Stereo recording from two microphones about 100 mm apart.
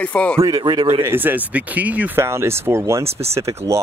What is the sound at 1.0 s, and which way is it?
Speech, 20° right (ahead or behind).